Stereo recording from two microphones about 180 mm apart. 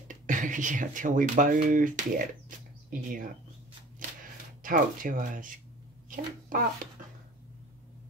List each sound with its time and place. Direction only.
0.1 s speech: 45° right (ahead or behind)
4.6 s speech: 50° right (ahead or behind)